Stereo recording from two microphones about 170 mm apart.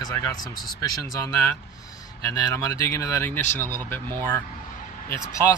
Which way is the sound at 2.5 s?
20° left (ahead or behind).